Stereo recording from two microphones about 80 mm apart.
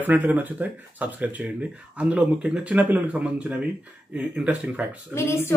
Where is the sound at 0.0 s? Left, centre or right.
Right.